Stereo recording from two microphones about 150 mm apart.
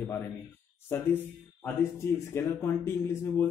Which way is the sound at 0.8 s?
15° left (ahead or behind).